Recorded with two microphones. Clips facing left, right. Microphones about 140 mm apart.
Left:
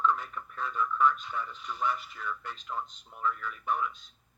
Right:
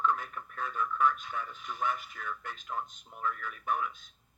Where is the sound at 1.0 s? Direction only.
50° right (ahead or behind).